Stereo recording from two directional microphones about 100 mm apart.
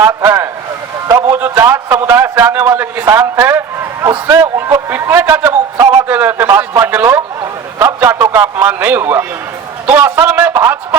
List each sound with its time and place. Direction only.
0.0 s a man's voice: 25° right (ahead or behind)
5.7 s a sound: 35° right (ahead or behind)
6.1 s a man's voice: 15° right (ahead or behind)